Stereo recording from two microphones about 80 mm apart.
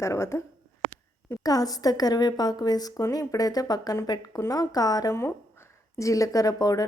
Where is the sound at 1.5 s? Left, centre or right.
Left.